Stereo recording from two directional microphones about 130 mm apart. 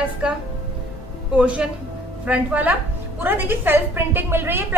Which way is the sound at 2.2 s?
10° right (ahead or behind).